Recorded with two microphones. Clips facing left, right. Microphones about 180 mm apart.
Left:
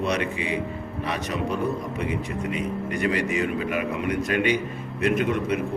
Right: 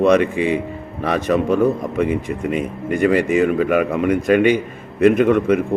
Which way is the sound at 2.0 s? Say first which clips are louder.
Right 10 dB; 50° right (ahead or behind).